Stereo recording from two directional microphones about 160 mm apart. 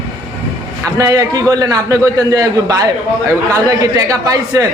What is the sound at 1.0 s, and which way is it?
A man's voice, 20° right (ahead or behind).